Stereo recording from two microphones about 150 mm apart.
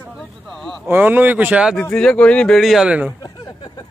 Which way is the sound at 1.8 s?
5° left (ahead or behind).